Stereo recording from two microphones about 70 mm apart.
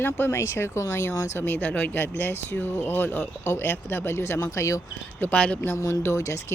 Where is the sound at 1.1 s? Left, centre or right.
Left.